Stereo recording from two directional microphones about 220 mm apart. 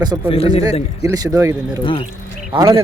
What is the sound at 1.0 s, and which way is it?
Speech, 15° right (ahead or behind).